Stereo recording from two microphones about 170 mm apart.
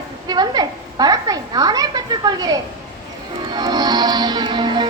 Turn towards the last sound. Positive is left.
turn(degrees=-25)  # may be behind; listen again after turning